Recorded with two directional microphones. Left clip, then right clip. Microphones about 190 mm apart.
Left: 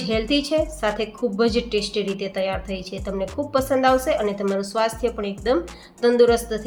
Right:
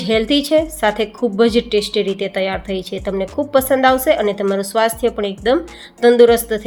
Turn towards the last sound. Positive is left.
turn(degrees=-35)  # may be behind; listen again after turning